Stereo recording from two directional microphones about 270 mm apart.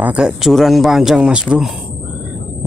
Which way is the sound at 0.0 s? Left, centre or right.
Centre.